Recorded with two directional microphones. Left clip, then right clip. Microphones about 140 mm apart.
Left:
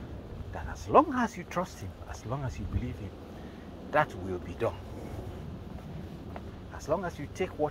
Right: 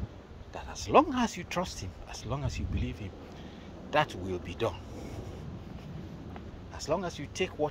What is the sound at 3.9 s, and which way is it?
Speech, 45° right (ahead or behind).